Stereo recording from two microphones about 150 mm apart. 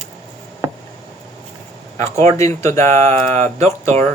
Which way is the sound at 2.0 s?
20° left (ahead or behind).